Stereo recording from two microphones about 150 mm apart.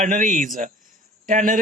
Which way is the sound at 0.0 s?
60° right (ahead or behind).